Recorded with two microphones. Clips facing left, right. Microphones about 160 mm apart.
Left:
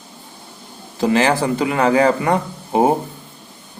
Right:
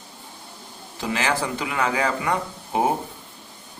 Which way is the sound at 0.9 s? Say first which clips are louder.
Left 9 dB; 35° left (ahead or behind).